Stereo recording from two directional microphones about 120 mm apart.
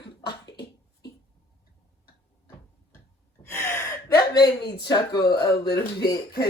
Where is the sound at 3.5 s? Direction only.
20° left (ahead or behind).